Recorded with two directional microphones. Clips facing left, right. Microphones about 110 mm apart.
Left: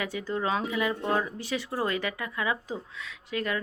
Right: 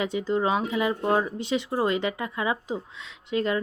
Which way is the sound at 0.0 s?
20° right (ahead or behind).